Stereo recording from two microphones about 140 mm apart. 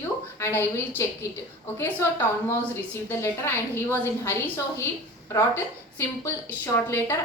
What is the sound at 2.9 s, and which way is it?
A woman's voice, 15° left (ahead or behind).